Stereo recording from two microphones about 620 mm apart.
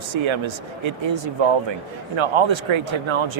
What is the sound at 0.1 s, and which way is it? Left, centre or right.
Speech, right.